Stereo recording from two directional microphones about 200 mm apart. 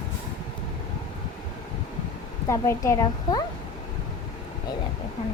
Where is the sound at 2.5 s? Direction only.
15° left (ahead or behind).